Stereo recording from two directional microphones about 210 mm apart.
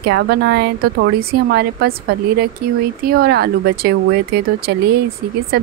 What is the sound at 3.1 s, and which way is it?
Speech, 50° right (ahead or behind).